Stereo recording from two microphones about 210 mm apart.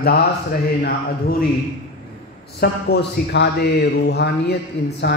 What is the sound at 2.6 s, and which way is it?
Speech, 50° left (ahead or behind).